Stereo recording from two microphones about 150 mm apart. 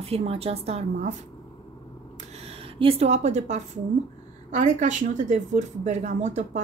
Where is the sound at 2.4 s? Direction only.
40° right (ahead or behind).